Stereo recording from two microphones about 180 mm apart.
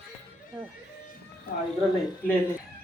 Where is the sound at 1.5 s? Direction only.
55° left (ahead or behind).